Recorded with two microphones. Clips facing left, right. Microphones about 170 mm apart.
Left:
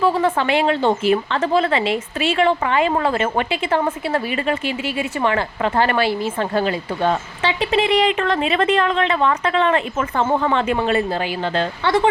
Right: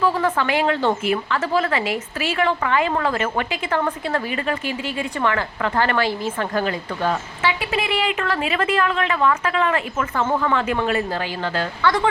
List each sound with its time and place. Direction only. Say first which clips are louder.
0.0 s a woman's voice: left 2 dB; 15° left (ahead or behind)
1.0 s a woman's voice: left 4 dB; 30° left (ahead or behind)